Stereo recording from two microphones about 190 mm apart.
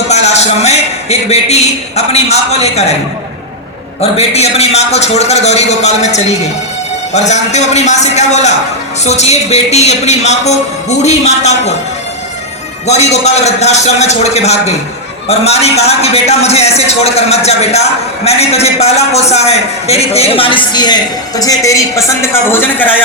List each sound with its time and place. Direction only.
0.1 s a sound: 35° left (ahead or behind)
1.3 s speech: 35° left (ahead or behind)
4.0 s speech: 35° left (ahead or behind)
12.9 s a man's voice: 35° left (ahead or behind); by 23.0 s 10° left (ahead or behind)